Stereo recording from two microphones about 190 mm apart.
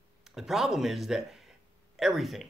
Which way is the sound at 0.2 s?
Centre (ahead or behind).